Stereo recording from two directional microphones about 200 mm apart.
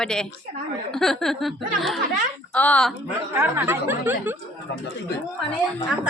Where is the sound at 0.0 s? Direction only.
5° left (ahead or behind).